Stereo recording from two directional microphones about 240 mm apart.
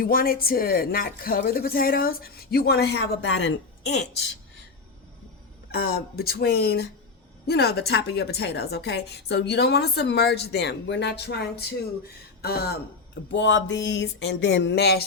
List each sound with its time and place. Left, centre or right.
0.0 s speech: left
5.7 s a woman's voice: left